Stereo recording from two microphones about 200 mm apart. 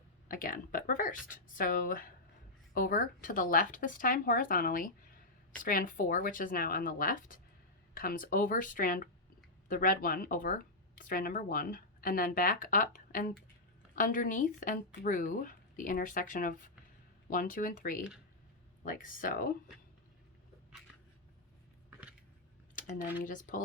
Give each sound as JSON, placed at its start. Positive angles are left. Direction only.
{"t": 0.3, "sound": "speech", "side_deg": 45}
{"t": 22.7, "sound": "speech", "side_deg": 40}